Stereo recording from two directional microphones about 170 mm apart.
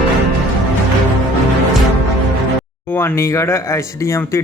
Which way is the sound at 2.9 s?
15° left (ahead or behind).